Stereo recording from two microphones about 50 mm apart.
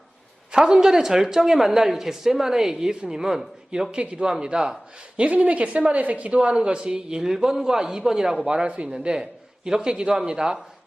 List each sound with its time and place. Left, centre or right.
0.5 s a woman's voice: centre
4.0 s a woman's voice: right
8.4 s a woman's voice: right